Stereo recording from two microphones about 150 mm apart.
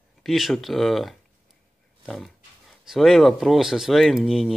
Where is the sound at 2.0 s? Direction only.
Centre (ahead or behind).